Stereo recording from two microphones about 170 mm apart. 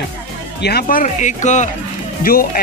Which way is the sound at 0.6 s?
65° left (ahead or behind).